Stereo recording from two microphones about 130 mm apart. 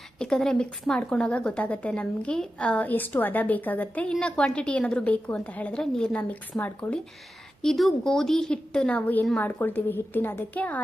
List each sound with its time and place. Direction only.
0.2 s speech: 5° left (ahead or behind)
7.6 s speech: centre (ahead or behind)